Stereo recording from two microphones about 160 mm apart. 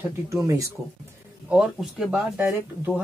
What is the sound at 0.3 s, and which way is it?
Speech, 20° right (ahead or behind).